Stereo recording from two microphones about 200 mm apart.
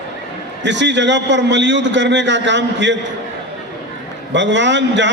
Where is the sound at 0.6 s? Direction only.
60° right (ahead or behind).